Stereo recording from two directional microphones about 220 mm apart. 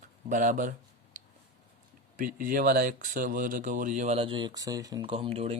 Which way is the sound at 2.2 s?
40° right (ahead or behind).